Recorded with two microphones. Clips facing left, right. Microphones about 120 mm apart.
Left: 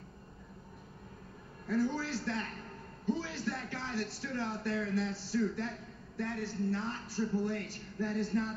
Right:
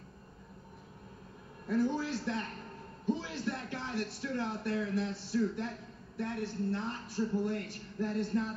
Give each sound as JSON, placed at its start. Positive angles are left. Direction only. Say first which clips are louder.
{"t": 1.7, "sound": "speech", "louder": "right 1 dB", "side_deg": -20}